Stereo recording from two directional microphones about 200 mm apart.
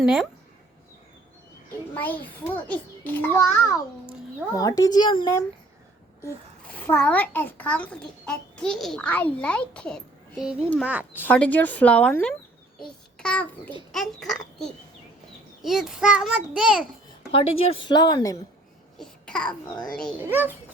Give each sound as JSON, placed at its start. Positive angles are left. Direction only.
{"t": 0.0, "sound": "a child's voice", "side_deg": -5}
{"t": 1.9, "sound": "a child's voice", "side_deg": 10}
{"t": 6.2, "sound": "a child's voice", "side_deg": 5}
{"t": 11.3, "sound": "a child's voice", "side_deg": 10}
{"t": 17.6, "sound": "speech", "side_deg": 25}
{"t": 18.9, "sound": "babbling", "side_deg": 5}
{"t": 19.6, "sound": "speech", "side_deg": 20}
{"t": 19.9, "sound": "a child's voice", "side_deg": 5}
{"t": 20.1, "sound": "speech", "side_deg": -10}